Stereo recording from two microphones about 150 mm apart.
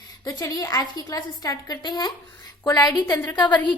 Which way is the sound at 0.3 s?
25° left (ahead or behind).